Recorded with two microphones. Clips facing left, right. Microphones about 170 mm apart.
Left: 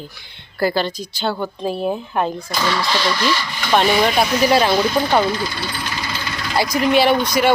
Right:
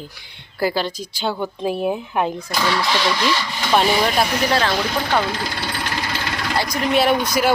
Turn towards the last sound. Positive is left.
turn(degrees=-5)  # may be behind; listen again after turning